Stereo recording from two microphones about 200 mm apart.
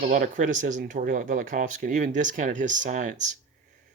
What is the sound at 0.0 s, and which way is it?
Speech, 40° right (ahead or behind).